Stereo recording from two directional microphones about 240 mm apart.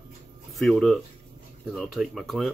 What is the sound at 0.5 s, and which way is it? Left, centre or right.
Speech, centre.